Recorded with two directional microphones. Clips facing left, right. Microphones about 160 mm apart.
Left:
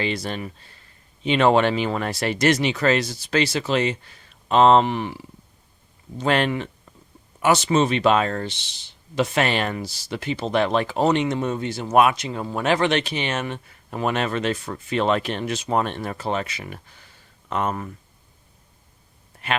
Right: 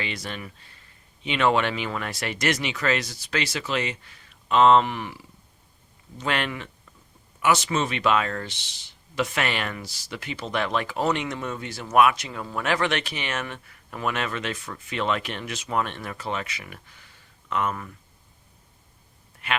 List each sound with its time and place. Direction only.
0.0 s speech: 35° left (ahead or behind)